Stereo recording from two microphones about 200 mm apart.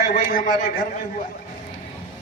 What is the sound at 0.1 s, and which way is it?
Speech, 45° left (ahead or behind).